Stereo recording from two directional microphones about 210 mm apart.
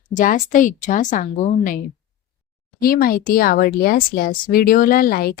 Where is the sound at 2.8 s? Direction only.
45° left (ahead or behind).